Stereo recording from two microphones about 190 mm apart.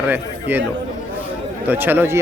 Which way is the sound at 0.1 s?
10° right (ahead or behind).